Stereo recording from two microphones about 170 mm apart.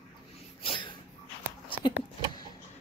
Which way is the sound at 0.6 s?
30° left (ahead or behind).